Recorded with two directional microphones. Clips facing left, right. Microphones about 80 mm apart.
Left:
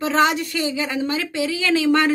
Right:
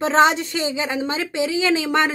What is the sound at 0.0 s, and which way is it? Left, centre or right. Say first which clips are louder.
Music: right 2 dB; right.